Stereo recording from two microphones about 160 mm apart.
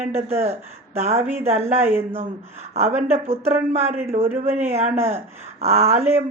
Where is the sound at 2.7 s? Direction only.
40° right (ahead or behind).